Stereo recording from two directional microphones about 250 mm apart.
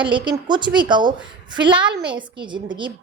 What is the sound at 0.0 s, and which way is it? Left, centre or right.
A woman's voice, centre.